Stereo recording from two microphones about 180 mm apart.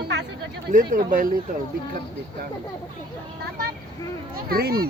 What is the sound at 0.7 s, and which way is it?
Speech, 45° right (ahead or behind).